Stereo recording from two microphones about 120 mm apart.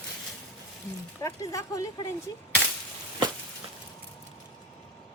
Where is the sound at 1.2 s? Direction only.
25° left (ahead or behind).